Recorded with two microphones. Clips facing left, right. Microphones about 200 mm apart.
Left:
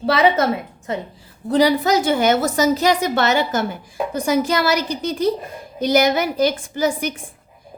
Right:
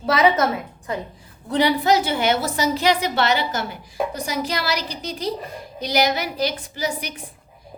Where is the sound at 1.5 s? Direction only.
40° left (ahead or behind).